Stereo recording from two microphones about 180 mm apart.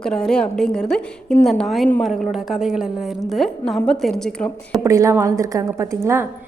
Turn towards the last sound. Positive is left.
turn(degrees=-15)  # may be behind; listen again after turning